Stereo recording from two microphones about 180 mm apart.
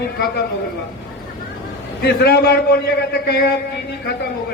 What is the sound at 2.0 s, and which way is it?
A man's voice, 60° left (ahead or behind).